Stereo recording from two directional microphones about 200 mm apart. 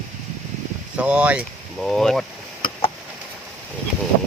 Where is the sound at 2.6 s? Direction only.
25° left (ahead or behind).